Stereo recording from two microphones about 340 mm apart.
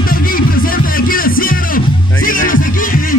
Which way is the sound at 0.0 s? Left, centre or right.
Left.